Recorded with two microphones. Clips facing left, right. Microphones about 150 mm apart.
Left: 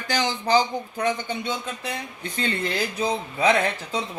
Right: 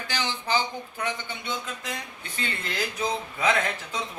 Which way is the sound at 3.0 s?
35° left (ahead or behind).